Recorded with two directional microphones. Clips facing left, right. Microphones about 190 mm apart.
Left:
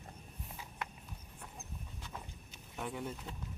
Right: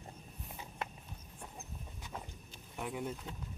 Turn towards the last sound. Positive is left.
turn(degrees=-5)  # may be behind; listen again after turning